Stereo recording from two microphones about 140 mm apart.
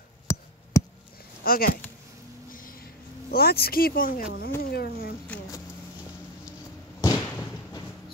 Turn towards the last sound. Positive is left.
turn(degrees=20)  # may be behind; listen again after turning